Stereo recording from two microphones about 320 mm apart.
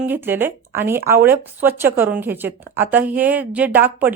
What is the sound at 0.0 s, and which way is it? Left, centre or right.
Speech, centre.